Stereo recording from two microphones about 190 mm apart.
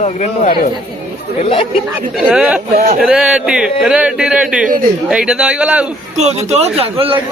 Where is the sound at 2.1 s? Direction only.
5° right (ahead or behind).